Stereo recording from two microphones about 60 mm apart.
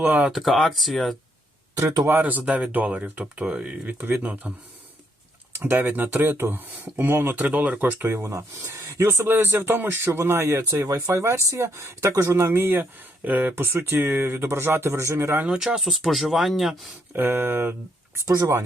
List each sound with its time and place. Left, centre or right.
0.0 s speech: right
0.3 s speech: centre
1.7 s speech: right
2.0 s speech: right
5.5 s speech: right
7.3 s speech: right
8.1 s speech: right
11.1 s speech: right
12.0 s speech: right
12.5 s speech: right
13.6 s speech: right
15.4 s speech: centre
17.2 s speech: right